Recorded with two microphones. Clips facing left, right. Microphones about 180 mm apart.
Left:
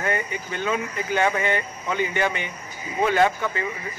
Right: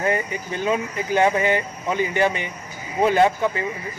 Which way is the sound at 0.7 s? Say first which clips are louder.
Right 3 dB; 30° right (ahead or behind).